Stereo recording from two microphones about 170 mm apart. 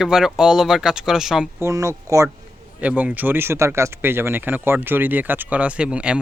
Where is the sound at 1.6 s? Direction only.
20° right (ahead or behind).